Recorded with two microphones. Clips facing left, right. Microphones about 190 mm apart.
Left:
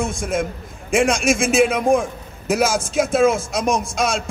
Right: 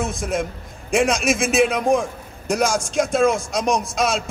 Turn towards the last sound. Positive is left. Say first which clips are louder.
# even
turn(degrees=0)  # may be behind; listen again after turning